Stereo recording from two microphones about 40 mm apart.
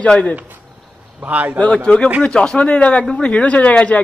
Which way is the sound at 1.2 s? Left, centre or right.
Right.